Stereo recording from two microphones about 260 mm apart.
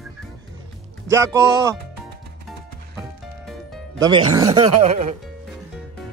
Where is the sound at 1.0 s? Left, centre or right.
Centre.